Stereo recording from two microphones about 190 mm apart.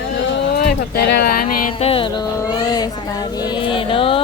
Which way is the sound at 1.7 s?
30° left (ahead or behind).